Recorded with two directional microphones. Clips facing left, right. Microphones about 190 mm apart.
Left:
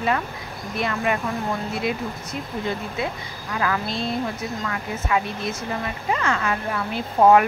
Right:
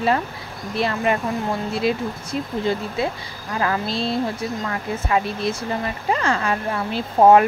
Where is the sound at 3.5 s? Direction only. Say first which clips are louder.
Right 2 dB; 30° right (ahead or behind).